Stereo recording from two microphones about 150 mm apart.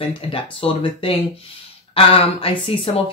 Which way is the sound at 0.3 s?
40° left (ahead or behind).